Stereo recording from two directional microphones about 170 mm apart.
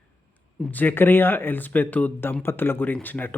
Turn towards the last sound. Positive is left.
turn(degrees=10)  # may be behind; listen again after turning